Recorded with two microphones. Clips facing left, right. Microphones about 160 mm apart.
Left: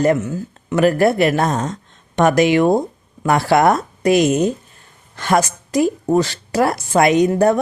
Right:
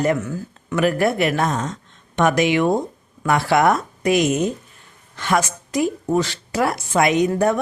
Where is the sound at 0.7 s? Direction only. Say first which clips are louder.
Left 4 dB; 35° left (ahead or behind).